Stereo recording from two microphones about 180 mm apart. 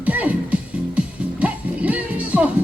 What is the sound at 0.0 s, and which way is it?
Music, 10° right (ahead or behind).